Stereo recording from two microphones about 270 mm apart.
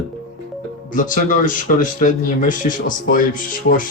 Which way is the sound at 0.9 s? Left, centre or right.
Left.